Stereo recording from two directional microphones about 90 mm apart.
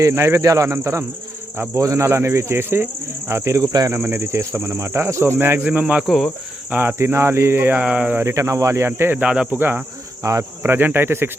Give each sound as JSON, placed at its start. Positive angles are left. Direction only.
{"t": 0.0, "sound": "speech", "side_deg": -30}
{"t": 3.9, "sound": "speech", "side_deg": -30}
{"t": 6.1, "sound": "cricket", "side_deg": 0}
{"t": 6.7, "sound": "speech", "side_deg": -20}
{"t": 7.8, "sound": "speech", "side_deg": -15}
{"t": 8.2, "sound": "speech", "side_deg": -35}
{"t": 8.9, "sound": "speech", "side_deg": -20}
{"t": 9.2, "sound": "speech", "side_deg": -10}
{"t": 9.6, "sound": "speech", "side_deg": -20}
{"t": 10.2, "sound": "speech", "side_deg": -35}
{"t": 10.6, "sound": "speech", "side_deg": -25}